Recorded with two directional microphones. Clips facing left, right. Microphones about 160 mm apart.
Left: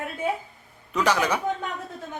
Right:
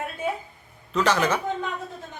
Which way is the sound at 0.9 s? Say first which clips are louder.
Right 1 dB; 10° left (ahead or behind).